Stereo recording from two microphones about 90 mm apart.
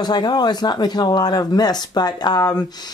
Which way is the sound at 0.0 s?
50° left (ahead or behind).